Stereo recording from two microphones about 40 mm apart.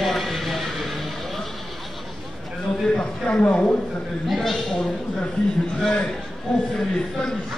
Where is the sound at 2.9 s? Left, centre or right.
Left.